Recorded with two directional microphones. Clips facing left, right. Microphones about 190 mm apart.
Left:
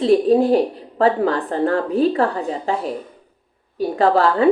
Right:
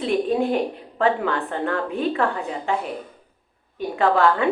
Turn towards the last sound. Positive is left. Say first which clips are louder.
# left 3 dB
turn(degrees=35)  # may be behind; listen again after turning